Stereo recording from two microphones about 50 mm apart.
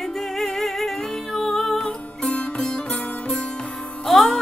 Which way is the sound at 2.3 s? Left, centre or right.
Centre.